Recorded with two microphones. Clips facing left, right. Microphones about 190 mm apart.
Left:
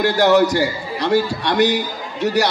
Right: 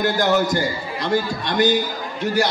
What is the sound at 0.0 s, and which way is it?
Speech, 70° left (ahead or behind).